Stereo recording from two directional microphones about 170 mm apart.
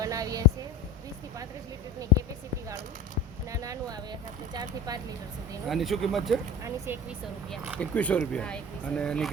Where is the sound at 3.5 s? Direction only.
20° right (ahead or behind).